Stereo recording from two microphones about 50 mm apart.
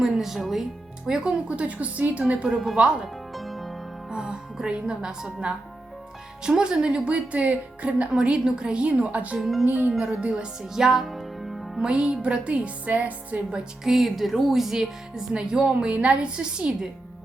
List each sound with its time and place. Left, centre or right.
0.0 s speech: centre
1.5 s speech: right
3.3 s music: centre
4.1 s speech: centre
8.1 s speech: centre
9.4 s music: centre
9.6 s speech: right
10.0 s speech: right; by 11.8 s centre
11.8 s speech: centre
13.8 s music: centre
15.3 s speech: centre